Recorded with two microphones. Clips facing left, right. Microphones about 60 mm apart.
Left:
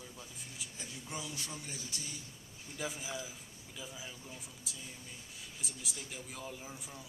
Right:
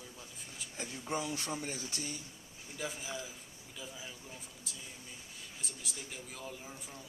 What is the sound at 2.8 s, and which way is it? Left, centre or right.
Speech, centre.